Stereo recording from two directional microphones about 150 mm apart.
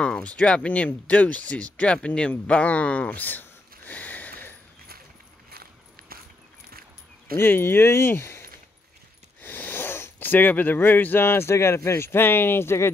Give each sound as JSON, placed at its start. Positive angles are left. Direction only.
{"t": 0.0, "sound": "speech", "side_deg": 5}
{"t": 5.5, "sound": "a sound", "side_deg": -90}
{"t": 7.3, "sound": "speech", "side_deg": 15}
{"t": 9.4, "sound": "speech", "side_deg": 15}